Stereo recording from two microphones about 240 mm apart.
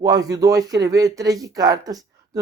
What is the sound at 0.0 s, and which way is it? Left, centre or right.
Speech, centre.